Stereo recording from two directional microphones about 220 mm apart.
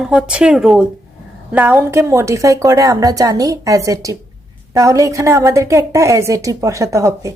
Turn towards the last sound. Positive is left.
turn(degrees=-15)  # may be behind; listen again after turning